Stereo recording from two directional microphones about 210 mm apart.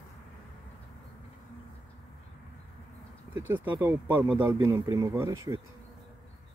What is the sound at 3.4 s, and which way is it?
Speech, 10° right (ahead or behind).